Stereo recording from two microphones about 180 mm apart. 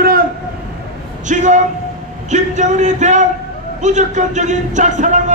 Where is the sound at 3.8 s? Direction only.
40° right (ahead or behind).